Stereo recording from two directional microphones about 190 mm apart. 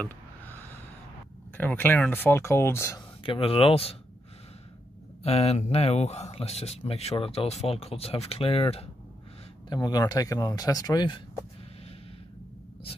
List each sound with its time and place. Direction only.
1.6 s speech: 10° left (ahead or behind)
3.3 s speech: 30° left (ahead or behind)
5.2 s a man's voice: 35° left (ahead or behind)
9.7 s speech: 20° left (ahead or behind)